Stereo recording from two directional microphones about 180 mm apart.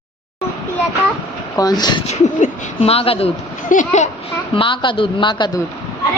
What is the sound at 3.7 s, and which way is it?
Speech, 45° left (ahead or behind).